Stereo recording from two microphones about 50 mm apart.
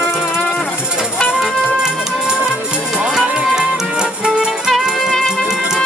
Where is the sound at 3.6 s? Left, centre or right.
Centre.